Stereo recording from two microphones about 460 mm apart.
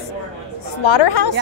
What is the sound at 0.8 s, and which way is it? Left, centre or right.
Speech, left.